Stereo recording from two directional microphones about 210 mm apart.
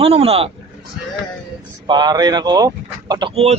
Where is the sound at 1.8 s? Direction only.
20° right (ahead or behind).